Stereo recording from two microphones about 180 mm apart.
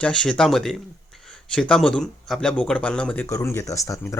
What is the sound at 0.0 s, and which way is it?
Speech, 5° left (ahead or behind).